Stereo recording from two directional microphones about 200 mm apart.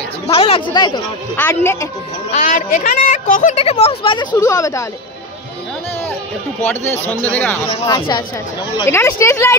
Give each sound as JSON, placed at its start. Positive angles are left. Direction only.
{"t": 0.3, "sound": "speech", "side_deg": 25}
{"t": 1.3, "sound": "speech", "side_deg": 10}
{"t": 2.3, "sound": "speech", "side_deg": 40}
{"t": 6.6, "sound": "speech", "side_deg": 10}